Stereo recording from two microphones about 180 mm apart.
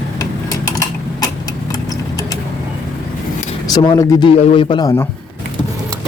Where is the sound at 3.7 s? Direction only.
25° left (ahead or behind).